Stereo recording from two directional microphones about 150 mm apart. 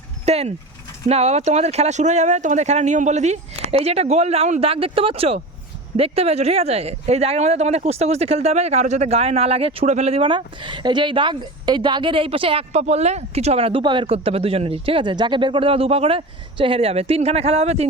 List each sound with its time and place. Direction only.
0.3 s speech: 45° right (ahead or behind)